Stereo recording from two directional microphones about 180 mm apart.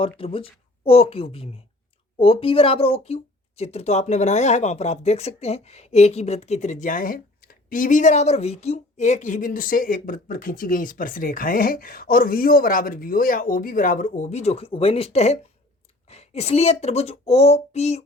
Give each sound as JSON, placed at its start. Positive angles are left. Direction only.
{"t": 0.2, "sound": "speech", "side_deg": 30}